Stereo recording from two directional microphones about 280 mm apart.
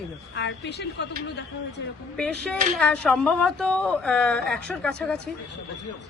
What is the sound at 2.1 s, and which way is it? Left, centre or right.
Speech, centre.